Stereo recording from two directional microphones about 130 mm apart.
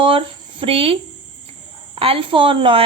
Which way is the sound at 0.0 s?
45° right (ahead or behind).